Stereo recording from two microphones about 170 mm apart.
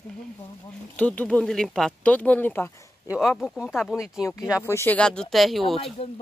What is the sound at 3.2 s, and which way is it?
Speech, centre (ahead or behind).